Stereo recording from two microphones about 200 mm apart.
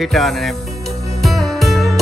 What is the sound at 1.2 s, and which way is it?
Music, centre (ahead or behind).